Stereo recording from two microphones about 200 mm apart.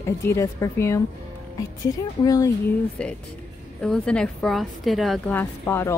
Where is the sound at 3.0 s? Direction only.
5° left (ahead or behind).